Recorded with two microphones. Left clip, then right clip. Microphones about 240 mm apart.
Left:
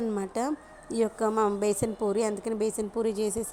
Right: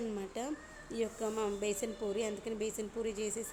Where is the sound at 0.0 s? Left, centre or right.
Left.